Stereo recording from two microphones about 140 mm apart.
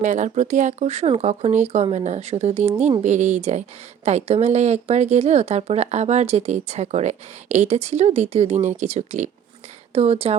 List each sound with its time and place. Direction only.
0.0 s speech: 60° right (ahead or behind)
9.9 s speech: 45° right (ahead or behind)